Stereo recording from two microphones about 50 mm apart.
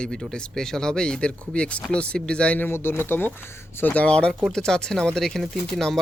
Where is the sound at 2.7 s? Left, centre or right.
Left.